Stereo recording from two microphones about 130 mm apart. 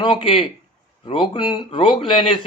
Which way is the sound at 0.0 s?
40° left (ahead or behind).